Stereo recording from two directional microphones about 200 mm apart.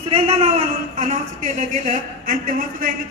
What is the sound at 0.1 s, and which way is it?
A man's voice, 30° right (ahead or behind).